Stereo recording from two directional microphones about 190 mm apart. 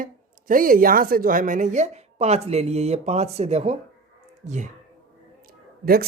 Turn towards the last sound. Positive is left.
turn(degrees=-55)  # may be behind; listen again after turning